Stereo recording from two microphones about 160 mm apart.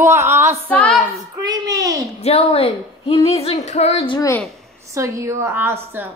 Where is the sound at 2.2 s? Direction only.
40° left (ahead or behind).